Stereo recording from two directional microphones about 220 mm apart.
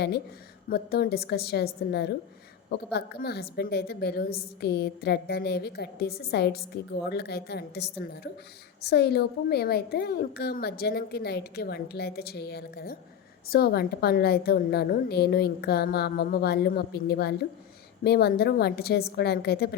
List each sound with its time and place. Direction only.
0.7 s a woman's voice: 45° left (ahead or behind)